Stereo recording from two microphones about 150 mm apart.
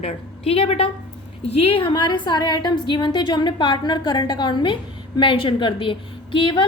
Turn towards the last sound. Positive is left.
turn(degrees=35)  # may be behind; listen again after turning